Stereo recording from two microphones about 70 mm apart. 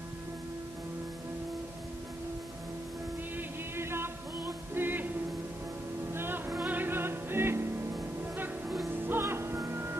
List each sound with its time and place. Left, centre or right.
3.3 s music: right
6.1 s music: right
8.9 s music: right